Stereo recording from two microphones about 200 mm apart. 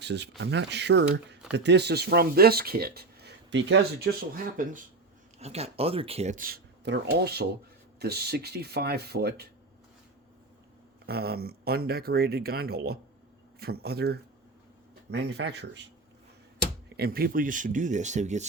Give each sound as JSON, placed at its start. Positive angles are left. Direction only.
{"t": 0.0, "sound": "speech", "side_deg": -60}
{"t": 5.4, "sound": "speech", "side_deg": -30}
{"t": 11.0, "sound": "speech", "side_deg": -50}
{"t": 17.0, "sound": "speech", "side_deg": -50}